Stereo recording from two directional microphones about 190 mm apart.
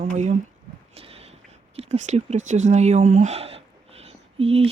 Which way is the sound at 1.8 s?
35° right (ahead or behind).